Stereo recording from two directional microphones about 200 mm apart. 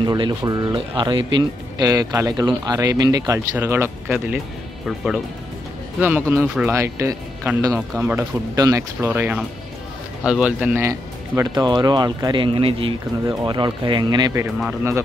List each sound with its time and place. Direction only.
0.0 s speech: 20° right (ahead or behind); by 6.7 s centre (ahead or behind)
6.7 s speech: 15° right (ahead or behind)